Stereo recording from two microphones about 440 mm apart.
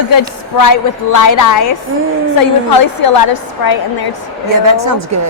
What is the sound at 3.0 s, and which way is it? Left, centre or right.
A woman's voice, left.